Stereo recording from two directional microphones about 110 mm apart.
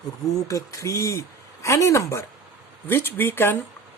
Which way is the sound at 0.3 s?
30° left (ahead or behind).